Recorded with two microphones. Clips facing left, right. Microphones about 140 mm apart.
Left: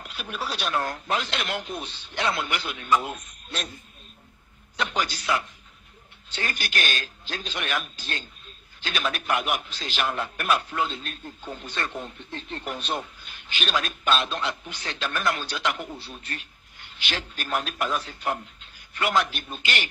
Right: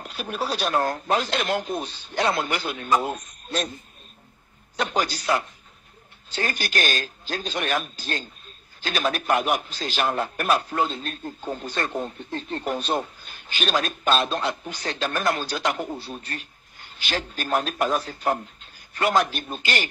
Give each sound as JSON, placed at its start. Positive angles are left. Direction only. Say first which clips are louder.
{"t": 0.0, "sound": "a man's voice", "louder": "right 5 dB", "side_deg": -40}
{"t": 4.7, "sound": "a man's voice", "louder": "right 3 dB", "side_deg": -40}